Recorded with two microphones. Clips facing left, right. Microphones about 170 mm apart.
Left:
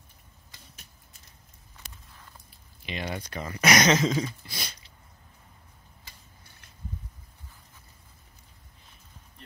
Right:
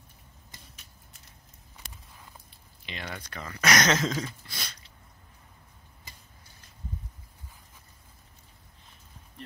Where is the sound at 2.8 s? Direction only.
15° left (ahead or behind).